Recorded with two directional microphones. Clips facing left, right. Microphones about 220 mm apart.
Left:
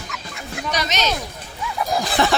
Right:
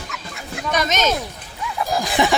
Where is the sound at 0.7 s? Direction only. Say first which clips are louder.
Right 4 dB; 50° right (ahead or behind).